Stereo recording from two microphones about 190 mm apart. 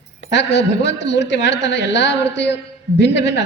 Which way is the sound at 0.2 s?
70° left (ahead or behind).